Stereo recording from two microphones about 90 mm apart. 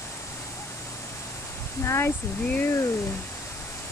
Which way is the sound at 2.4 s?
15° left (ahead or behind).